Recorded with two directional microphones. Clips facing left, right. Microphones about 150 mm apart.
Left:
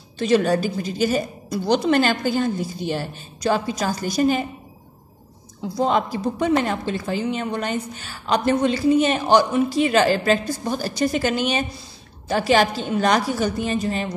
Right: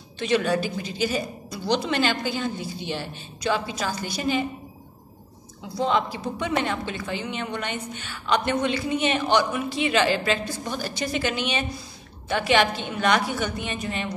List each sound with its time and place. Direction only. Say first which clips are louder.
0.2 s a woman's voice: left 4 dB; 40° left (ahead or behind)
5.8 s a woman's voice: left 3 dB; 45° left (ahead or behind)